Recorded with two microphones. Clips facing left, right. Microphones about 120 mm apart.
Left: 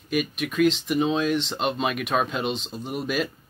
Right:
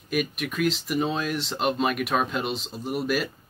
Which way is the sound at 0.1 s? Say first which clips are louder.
Left 1 dB; centre (ahead or behind).